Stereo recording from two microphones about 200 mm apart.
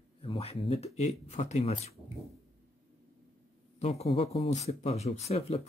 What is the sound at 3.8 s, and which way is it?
Speech, 30° left (ahead or behind).